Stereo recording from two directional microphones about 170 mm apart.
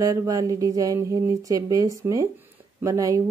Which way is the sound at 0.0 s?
20° right (ahead or behind).